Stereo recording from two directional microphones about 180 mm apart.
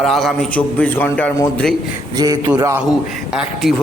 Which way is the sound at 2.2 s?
20° right (ahead or behind).